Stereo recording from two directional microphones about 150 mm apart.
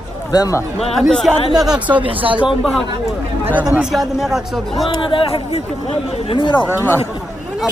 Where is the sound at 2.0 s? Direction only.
35° right (ahead or behind).